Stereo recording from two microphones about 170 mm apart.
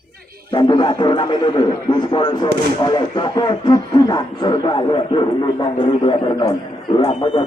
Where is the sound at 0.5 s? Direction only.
25° left (ahead or behind).